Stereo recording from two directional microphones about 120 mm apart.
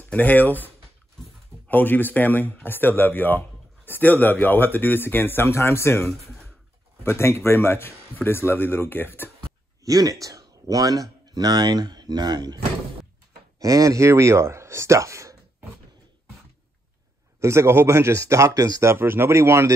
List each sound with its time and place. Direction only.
0.0 s speech: 15° left (ahead or behind)
1.7 s speech: 15° left (ahead or behind)
6.0 s speech: 5° left (ahead or behind)
7.0 s speech: 20° left (ahead or behind)
9.8 s speech: 30° right (ahead or behind)
13.6 s speech: 30° right (ahead or behind)
17.4 s speech: 25° right (ahead or behind)